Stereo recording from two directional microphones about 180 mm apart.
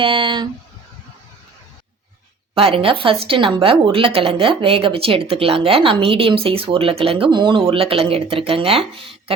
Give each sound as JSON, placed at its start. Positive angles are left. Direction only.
{"t": 0.0, "sound": "speech", "side_deg": -30}
{"t": 2.6, "sound": "a woman's voice", "side_deg": -30}